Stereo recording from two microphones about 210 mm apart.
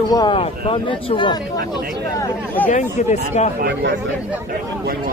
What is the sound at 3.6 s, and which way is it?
Speech, 55° right (ahead or behind).